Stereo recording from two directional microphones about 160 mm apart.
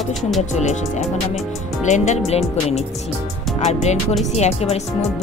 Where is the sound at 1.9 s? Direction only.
45° left (ahead or behind).